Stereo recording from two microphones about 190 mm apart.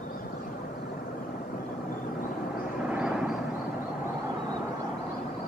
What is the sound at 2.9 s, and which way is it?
Vehicle, 5° right (ahead or behind).